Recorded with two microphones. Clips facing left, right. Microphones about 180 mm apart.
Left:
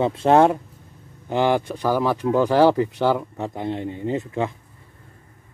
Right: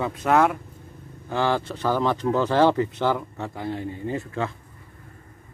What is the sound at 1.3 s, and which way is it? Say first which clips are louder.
Speech: left 4 dB; 15° left (ahead or behind).